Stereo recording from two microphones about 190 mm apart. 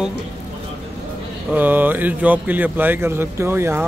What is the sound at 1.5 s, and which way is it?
Speech, 10° right (ahead or behind).